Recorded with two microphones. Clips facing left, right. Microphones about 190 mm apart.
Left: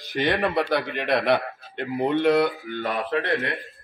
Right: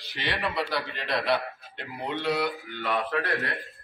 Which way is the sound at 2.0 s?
55° left (ahead or behind).